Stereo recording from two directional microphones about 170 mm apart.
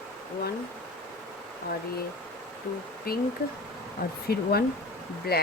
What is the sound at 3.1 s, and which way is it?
Speech, 60° left (ahead or behind).